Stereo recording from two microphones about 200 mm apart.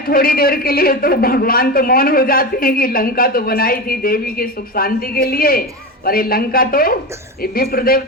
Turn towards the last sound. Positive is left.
turn(degrees=45)  # may be behind; listen again after turning